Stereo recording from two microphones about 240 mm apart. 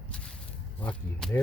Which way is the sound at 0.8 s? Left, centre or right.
Centre.